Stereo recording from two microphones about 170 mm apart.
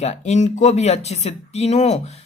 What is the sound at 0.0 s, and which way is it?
A man's voice, 40° left (ahead or behind).